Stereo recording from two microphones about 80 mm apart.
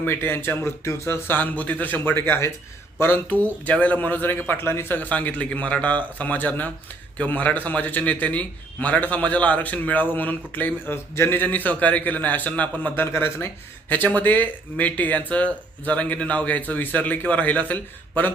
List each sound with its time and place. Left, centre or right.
0.0 s a man's voice: left
1.4 s a man's voice: left
13.1 s a man's voice: left